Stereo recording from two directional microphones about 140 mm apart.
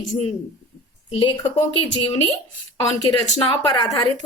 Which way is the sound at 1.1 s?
35° left (ahead or behind).